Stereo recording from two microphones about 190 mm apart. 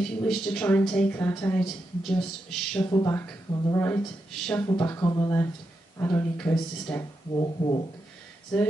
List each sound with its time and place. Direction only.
0.0 s a woman's voice: 5° left (ahead or behind)
2.9 s speech: 15° left (ahead or behind)
7.3 s speech: 25° left (ahead or behind)